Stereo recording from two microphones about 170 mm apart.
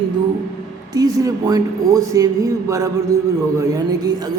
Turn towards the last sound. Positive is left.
turn(degrees=-20)  # may be behind; listen again after turning